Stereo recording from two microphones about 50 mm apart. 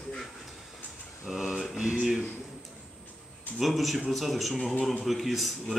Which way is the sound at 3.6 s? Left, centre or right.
Centre.